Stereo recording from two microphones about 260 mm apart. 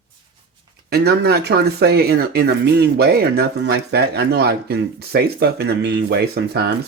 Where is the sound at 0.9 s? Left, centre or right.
Right.